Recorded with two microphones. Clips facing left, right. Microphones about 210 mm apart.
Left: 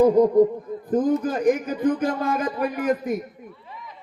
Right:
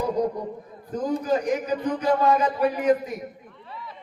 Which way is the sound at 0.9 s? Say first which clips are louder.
Left 3 dB; 50° left (ahead or behind).